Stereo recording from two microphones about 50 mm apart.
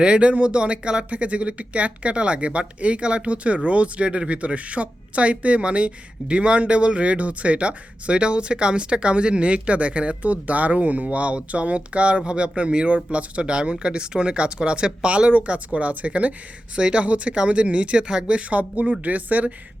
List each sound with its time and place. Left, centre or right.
0.0 s speech: right